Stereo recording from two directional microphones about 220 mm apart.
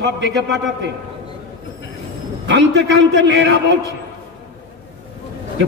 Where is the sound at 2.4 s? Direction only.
55° right (ahead or behind).